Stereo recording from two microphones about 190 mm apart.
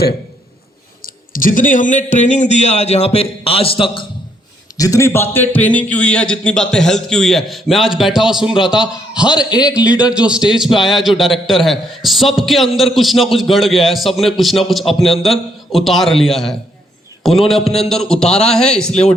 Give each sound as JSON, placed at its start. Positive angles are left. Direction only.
{"t": 1.0, "sound": "speech", "side_deg": 45}
{"t": 4.8, "sound": "a man's voice", "side_deg": 15}
{"t": 9.3, "sound": "a man's voice", "side_deg": 20}
{"t": 9.6, "sound": "a man's voice", "side_deg": -5}